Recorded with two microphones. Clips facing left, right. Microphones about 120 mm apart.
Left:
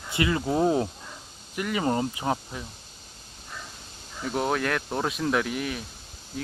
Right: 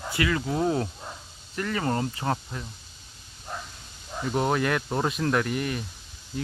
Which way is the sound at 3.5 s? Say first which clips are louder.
Right 5 dB; 45° right (ahead or behind).